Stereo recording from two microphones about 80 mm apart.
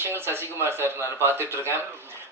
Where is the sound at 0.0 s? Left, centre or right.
Right.